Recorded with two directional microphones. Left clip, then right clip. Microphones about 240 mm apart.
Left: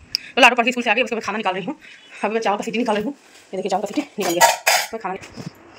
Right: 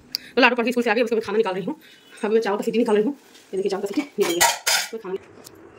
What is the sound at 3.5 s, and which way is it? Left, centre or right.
Speech, centre.